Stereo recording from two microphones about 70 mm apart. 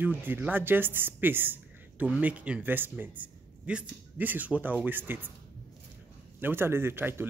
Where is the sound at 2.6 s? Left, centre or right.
Right.